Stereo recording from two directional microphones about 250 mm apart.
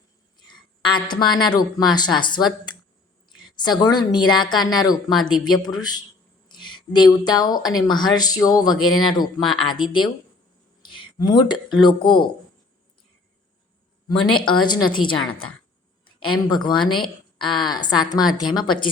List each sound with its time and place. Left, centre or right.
0.3 s speech: centre
10.8 s speech: centre
14.1 s a woman's voice: centre
16.2 s a woman's voice: centre